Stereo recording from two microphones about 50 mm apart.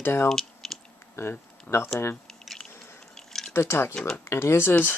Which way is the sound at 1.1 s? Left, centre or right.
Left.